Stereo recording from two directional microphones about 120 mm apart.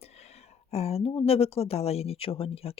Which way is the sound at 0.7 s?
60° left (ahead or behind).